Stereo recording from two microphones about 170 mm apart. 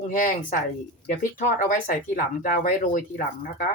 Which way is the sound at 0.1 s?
50° left (ahead or behind).